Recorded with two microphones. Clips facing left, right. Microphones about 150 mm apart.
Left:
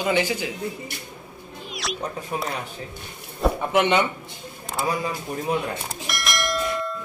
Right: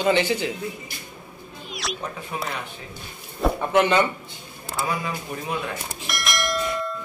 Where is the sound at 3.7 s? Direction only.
20° left (ahead or behind).